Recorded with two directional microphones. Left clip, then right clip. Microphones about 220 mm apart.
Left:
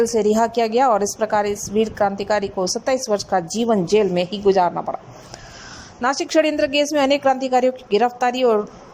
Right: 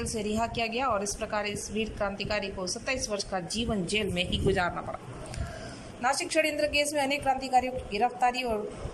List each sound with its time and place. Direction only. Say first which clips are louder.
0.0 s a woman's voice: left 14 dB; 35° left (ahead or behind)
6.0 s a woman's voice: left 9 dB; 35° left (ahead or behind)